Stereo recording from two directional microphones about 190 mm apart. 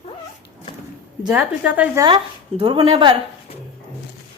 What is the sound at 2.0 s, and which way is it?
Speech, 25° right (ahead or behind).